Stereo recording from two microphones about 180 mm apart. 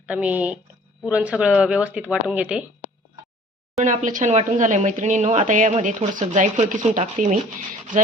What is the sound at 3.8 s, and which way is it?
Speech, 45° right (ahead or behind).